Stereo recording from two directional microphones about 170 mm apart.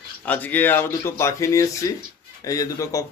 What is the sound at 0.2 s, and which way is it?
Speech, 10° left (ahead or behind).